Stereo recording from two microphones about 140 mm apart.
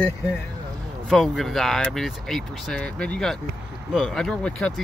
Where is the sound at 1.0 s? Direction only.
Centre (ahead or behind).